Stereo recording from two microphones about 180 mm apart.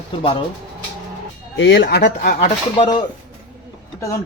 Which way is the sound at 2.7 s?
25° left (ahead or behind).